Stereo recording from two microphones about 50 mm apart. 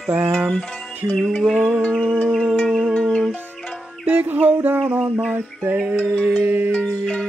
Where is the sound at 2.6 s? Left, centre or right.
Centre.